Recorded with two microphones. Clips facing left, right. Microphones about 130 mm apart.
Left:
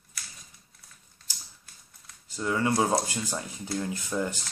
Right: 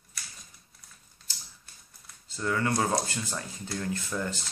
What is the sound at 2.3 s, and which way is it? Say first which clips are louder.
Speech: left 2 dB; 15° left (ahead or behind).